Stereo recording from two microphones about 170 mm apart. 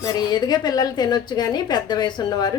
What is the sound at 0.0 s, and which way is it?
A woman's voice, 25° left (ahead or behind).